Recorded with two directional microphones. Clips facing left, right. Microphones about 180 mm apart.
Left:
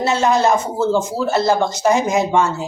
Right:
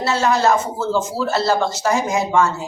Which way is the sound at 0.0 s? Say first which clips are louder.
Left 2 dB; 20° left (ahead or behind).